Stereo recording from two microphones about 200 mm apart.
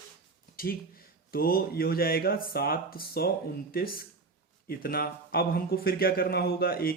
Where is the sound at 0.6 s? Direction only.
45° left (ahead or behind).